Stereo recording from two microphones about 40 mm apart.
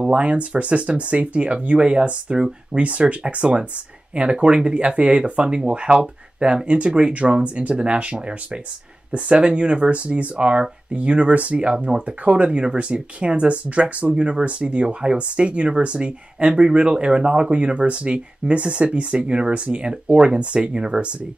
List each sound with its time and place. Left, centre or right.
0.0 s speech: right